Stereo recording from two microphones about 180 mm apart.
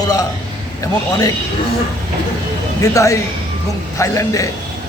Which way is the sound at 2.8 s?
15° left (ahead or behind).